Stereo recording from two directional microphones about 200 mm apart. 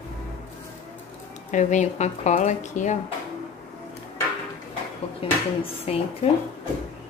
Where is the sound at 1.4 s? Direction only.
40° left (ahead or behind).